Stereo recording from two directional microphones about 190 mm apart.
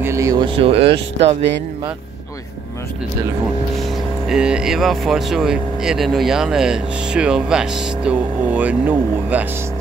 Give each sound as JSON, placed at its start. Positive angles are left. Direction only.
{"t": 0.0, "sound": "speech", "side_deg": -15}
{"t": 4.3, "sound": "speech", "side_deg": -5}